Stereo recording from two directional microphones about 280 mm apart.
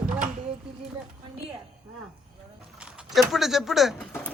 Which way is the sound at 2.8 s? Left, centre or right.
Centre.